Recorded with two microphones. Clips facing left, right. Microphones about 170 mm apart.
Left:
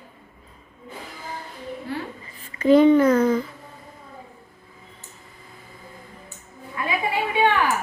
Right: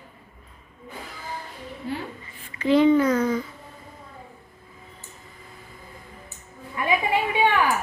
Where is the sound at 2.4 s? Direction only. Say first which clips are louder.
Left 4 dB; 45° left (ahead or behind).